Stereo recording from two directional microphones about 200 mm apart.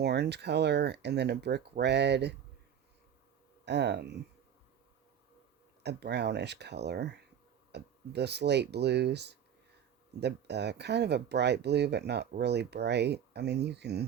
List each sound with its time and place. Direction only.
0.0 s speech: 55° right (ahead or behind)
3.7 s speech: 60° right (ahead or behind)
5.8 s speech: 55° right (ahead or behind)